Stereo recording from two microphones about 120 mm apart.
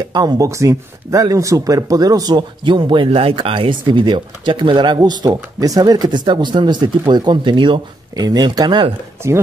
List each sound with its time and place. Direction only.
0.1 s speech: 35° right (ahead or behind)